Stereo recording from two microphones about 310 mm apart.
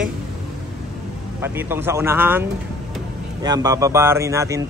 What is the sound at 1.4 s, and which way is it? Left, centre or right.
Speech, centre.